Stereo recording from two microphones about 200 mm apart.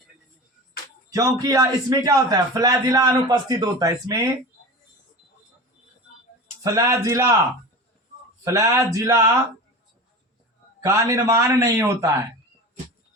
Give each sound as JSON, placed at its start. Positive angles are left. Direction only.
{"t": 1.1, "sound": "a man's voice", "side_deg": -15}
{"t": 6.6, "sound": "a man's voice", "side_deg": -15}
{"t": 8.4, "sound": "a man's voice", "side_deg": -15}
{"t": 10.8, "sound": "a man's voice", "side_deg": -15}